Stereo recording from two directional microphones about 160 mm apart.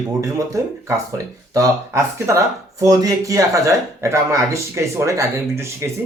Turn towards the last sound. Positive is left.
turn(degrees=-15)  # may be behind; listen again after turning